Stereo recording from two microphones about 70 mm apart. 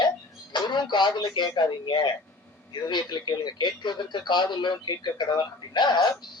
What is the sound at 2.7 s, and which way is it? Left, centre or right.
Speech, left.